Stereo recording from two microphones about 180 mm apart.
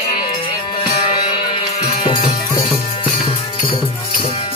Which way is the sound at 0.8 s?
30° left (ahead or behind).